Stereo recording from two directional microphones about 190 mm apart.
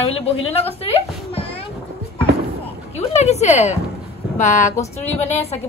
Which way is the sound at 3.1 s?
35° left (ahead or behind).